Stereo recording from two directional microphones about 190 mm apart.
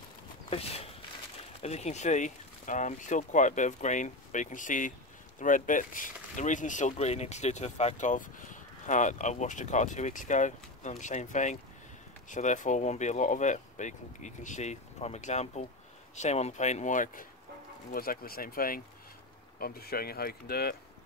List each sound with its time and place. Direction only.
0.5 s speech: 30° left (ahead or behind); by 20.7 s 55° left (ahead or behind)